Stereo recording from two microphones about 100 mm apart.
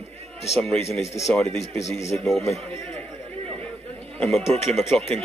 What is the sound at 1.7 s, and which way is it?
Speech, 30° left (ahead or behind).